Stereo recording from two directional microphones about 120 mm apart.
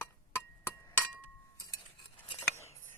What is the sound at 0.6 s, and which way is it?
Chink, 20° left (ahead or behind).